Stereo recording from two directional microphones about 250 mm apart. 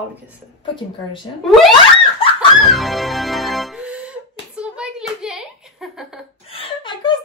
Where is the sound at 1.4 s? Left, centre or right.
Centre.